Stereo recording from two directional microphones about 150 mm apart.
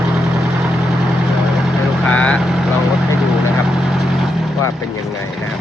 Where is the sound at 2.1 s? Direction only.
5° left (ahead or behind).